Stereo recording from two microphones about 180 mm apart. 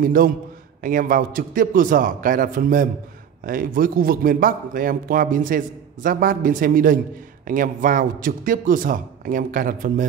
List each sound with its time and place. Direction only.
0.0 s a man's voice: 50° right (ahead or behind)